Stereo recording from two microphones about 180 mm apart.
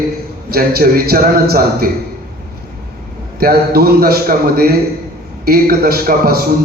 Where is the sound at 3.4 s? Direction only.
60° right (ahead or behind).